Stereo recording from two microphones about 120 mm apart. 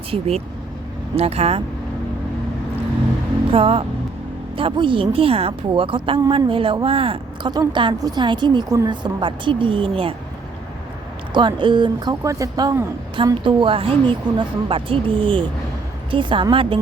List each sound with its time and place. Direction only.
0.1 s speech: 60° right (ahead or behind)
3.5 s a woman's voice: 50° right (ahead or behind)
7.5 s a woman's voice: 40° right (ahead or behind)
11.3 s a woman's voice: 40° right (ahead or behind)
13.1 s a woman's voice: 45° right (ahead or behind)